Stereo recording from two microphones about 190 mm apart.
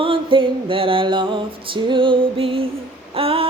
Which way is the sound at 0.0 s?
25° right (ahead or behind).